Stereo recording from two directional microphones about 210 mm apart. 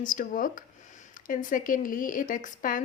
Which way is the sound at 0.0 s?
40° left (ahead or behind).